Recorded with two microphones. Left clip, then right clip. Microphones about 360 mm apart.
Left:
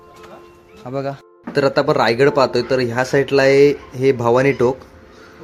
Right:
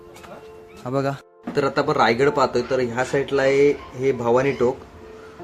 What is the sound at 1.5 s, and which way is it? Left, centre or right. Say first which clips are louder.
Speech: left 5 dB; centre.